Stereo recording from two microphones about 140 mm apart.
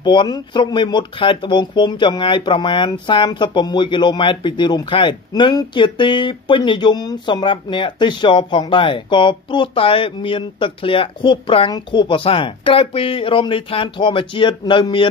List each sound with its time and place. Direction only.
0.0 s speech: 35° left (ahead or behind)